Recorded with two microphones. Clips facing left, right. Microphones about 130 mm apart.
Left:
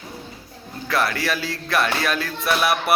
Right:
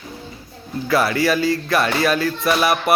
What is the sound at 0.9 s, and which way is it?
Speech, centre (ahead or behind).